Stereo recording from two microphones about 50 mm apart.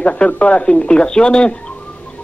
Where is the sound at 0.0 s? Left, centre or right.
Left.